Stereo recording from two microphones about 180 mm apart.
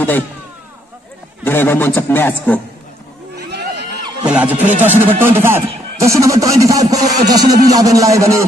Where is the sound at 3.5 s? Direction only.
70° right (ahead or behind).